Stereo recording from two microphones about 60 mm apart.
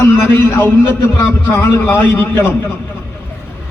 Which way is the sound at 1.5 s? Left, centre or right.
Left.